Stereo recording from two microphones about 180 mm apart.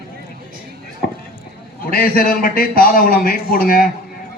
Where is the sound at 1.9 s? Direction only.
55° left (ahead or behind).